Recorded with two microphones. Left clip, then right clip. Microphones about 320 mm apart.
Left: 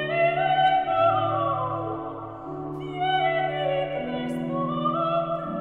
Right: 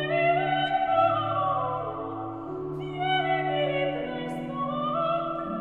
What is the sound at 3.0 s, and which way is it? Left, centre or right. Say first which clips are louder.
Music: left 3 dB; centre.